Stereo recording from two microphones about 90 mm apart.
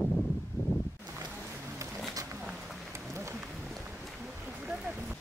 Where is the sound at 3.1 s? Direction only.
30° right (ahead or behind).